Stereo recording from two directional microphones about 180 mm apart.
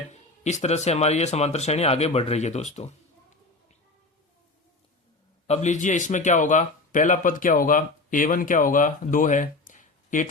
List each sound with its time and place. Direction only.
0.1 s speech: 40° left (ahead or behind)
5.5 s speech: 40° left (ahead or behind)